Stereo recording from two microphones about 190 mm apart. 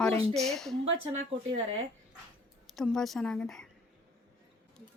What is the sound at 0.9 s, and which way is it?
Speech, 30° right (ahead or behind).